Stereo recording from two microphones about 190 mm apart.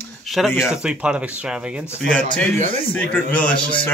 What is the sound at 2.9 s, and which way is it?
Speech, 5° left (ahead or behind).